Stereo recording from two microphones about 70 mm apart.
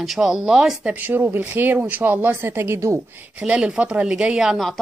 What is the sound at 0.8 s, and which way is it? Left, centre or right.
Speech, right.